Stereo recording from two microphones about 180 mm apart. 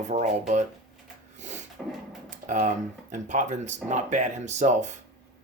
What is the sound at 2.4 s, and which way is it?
Speech, 45° right (ahead or behind).